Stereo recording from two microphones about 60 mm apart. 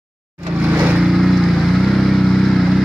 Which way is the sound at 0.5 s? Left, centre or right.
Right.